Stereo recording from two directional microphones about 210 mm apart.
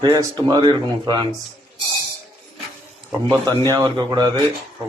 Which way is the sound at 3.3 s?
15° right (ahead or behind).